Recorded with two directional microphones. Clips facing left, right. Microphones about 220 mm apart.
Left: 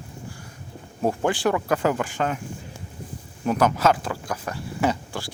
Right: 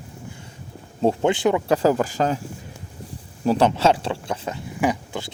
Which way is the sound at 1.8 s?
35° right (ahead or behind).